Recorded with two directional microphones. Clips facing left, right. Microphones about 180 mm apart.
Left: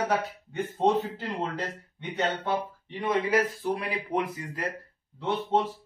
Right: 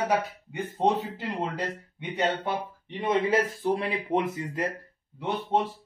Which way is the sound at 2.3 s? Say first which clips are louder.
Even; 20° right (ahead or behind).